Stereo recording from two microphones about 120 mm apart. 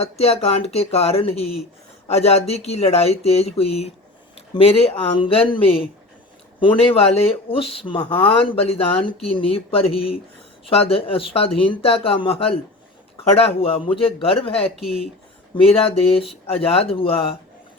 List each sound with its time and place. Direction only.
0.0 s speech: 60° left (ahead or behind)
15.6 s speech: 55° left (ahead or behind)